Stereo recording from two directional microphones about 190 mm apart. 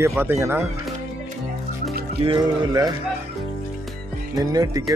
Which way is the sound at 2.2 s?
25° right (ahead or behind).